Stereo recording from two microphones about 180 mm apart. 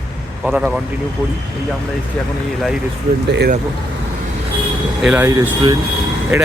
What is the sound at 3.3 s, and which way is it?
Speech, 70° right (ahead or behind).